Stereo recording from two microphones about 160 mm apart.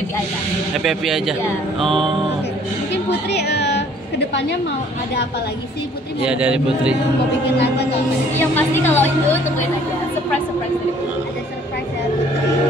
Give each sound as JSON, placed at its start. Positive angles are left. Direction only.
{"t": 0.8, "sound": "a man's voice", "side_deg": 0}
{"t": 2.9, "sound": "music", "side_deg": 90}
{"t": 4.3, "sound": "a woman's voice", "side_deg": 90}
{"t": 6.2, "sound": "a man's voice", "side_deg": -5}
{"t": 8.4, "sound": "a woman's voice", "side_deg": 10}